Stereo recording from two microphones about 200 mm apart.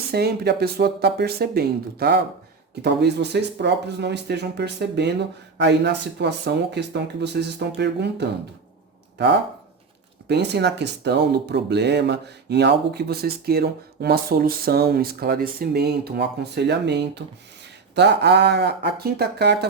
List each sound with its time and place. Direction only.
0.1 s speech: 55° right (ahead or behind)
10.2 s speech: 55° right (ahead or behind)